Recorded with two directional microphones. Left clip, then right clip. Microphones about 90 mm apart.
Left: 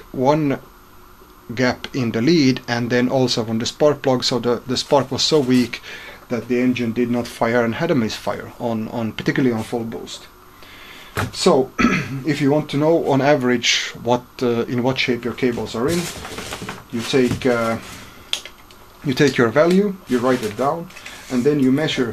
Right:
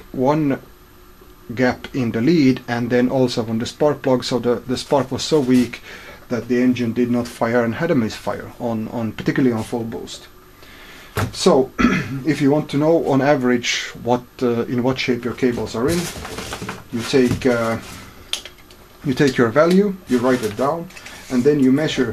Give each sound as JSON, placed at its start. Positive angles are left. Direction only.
{"t": 0.2, "sound": "speech", "side_deg": 30}
{"t": 11.3, "sound": "speech", "side_deg": 15}
{"t": 19.0, "sound": "speech", "side_deg": 20}
{"t": 21.5, "sound": "speech", "side_deg": 15}